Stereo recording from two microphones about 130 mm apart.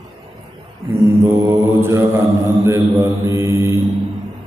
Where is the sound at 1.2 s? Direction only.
20° right (ahead or behind).